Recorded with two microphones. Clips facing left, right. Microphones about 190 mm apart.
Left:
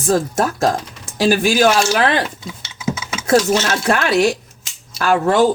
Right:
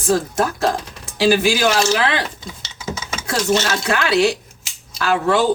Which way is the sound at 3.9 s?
50° left (ahead or behind).